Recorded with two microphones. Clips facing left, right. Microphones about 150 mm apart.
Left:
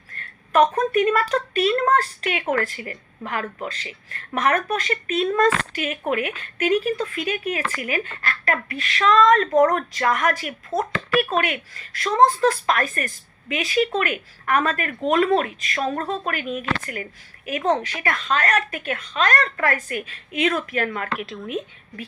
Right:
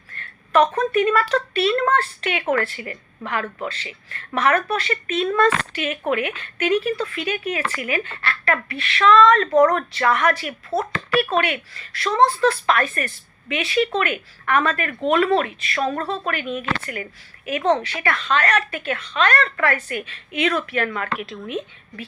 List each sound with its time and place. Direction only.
0.1 s speech: 40° left (ahead or behind)
21.1 s speech: centre (ahead or behind)